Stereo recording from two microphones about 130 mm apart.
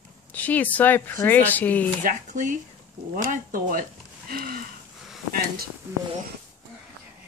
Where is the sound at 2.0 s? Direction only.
85° right.